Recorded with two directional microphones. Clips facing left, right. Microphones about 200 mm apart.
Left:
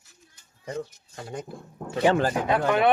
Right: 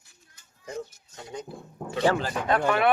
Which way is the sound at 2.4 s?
10° left (ahead or behind).